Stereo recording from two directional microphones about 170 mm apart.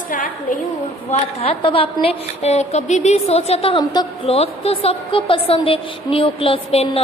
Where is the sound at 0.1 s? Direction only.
55° left (ahead or behind).